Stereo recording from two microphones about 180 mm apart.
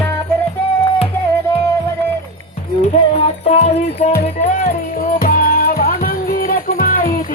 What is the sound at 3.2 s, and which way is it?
Music, 35° left (ahead or behind).